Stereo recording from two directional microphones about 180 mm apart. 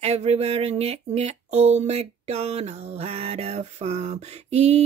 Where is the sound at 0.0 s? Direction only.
35° right (ahead or behind).